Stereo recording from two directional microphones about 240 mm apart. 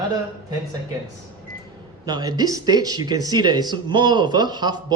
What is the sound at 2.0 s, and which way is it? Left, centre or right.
A man's voice, centre.